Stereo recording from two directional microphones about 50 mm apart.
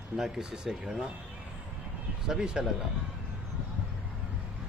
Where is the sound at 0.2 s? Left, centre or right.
Centre.